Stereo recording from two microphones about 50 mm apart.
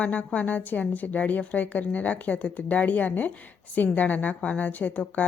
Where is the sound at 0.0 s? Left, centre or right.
Left.